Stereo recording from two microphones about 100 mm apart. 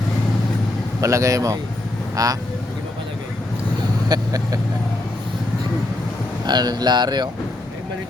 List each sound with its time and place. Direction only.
1.0 s speech: 30° right (ahead or behind)
4.1 s speech: 40° right (ahead or behind)
6.4 s speech: 45° right (ahead or behind)